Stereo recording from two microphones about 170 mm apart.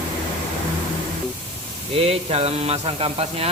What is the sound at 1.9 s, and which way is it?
Speech, 35° right (ahead or behind).